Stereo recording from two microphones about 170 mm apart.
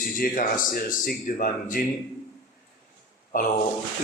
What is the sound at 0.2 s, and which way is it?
Speech, 55° left (ahead or behind).